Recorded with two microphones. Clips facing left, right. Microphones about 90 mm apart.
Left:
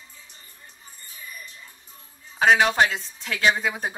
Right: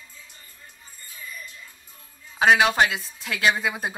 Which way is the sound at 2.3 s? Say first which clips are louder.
Even; 5° right (ahead or behind).